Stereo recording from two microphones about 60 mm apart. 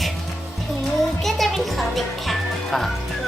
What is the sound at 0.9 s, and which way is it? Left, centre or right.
Music, centre.